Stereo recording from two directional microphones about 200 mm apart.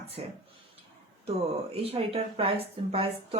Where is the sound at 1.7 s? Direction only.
30° right (ahead or behind).